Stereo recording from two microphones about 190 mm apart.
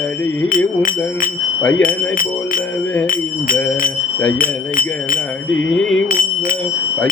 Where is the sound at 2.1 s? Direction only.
45° left (ahead or behind).